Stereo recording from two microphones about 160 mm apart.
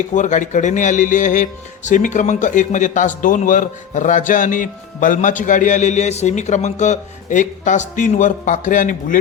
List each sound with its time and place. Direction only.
0.1 s a man's voice: 50° left (ahead or behind)